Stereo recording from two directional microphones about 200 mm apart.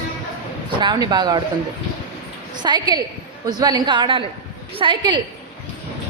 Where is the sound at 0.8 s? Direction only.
20° right (ahead or behind).